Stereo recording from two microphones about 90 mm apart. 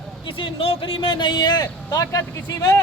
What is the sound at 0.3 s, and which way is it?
Speech, 80° left.